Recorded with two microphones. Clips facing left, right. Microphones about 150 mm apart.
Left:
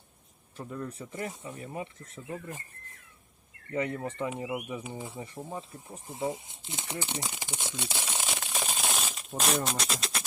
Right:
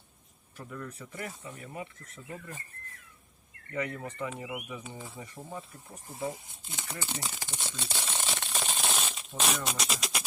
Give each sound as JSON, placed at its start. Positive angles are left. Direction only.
{"t": 0.5, "sound": "speech", "side_deg": 25}
{"t": 3.7, "sound": "speech", "side_deg": 25}
{"t": 6.7, "sound": "shuffling cards", "side_deg": 25}
{"t": 9.6, "sound": "speech", "side_deg": 0}